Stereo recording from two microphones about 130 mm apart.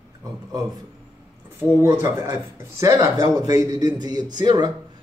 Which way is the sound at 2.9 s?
30° right (ahead or behind).